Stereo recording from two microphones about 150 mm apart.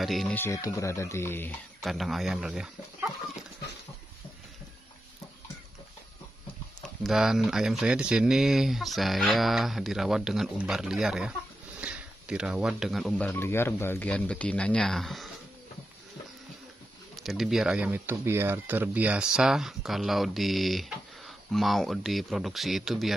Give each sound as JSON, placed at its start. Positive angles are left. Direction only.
{"t": 0.0, "sound": "speech", "side_deg": 0}
{"t": 0.3, "sound": "speech", "side_deg": 15}
{"t": 1.8, "sound": "speech", "side_deg": 0}
{"t": 6.8, "sound": "speech", "side_deg": 0}
{"t": 13.2, "sound": "speech", "side_deg": 15}
{"t": 17.1, "sound": "speech", "side_deg": 0}